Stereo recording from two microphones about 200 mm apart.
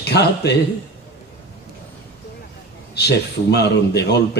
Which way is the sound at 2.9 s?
55° left (ahead or behind).